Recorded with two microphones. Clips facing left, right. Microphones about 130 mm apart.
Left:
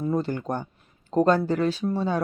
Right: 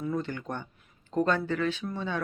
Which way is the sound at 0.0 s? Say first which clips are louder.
Left 6 dB; 35° left (ahead or behind).